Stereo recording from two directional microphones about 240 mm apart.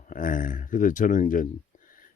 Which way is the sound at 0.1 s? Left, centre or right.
Left.